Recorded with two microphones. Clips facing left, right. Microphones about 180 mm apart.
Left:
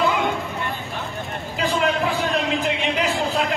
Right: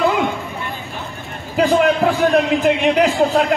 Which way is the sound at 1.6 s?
50° right (ahead or behind).